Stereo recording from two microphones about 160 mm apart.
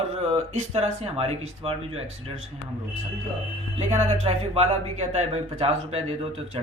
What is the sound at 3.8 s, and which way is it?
Speech, 45° right (ahead or behind).